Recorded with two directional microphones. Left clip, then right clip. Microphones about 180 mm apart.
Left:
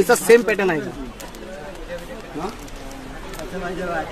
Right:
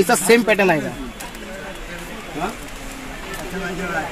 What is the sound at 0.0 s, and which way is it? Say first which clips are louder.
Speech: left 1 dB; 40° right (ahead or behind).